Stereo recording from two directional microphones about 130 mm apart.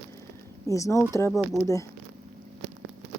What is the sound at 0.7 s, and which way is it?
Speech, 25° left (ahead or behind).